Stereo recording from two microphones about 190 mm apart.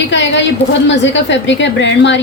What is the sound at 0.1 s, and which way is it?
A woman's voice, 70° left (ahead or behind).